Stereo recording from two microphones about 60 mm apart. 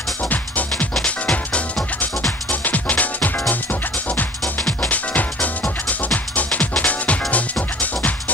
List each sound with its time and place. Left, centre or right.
0.3 s music: left
2.6 s music: left
4.8 s music: left